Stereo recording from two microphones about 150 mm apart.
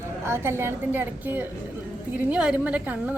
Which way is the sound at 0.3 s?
15° right (ahead or behind).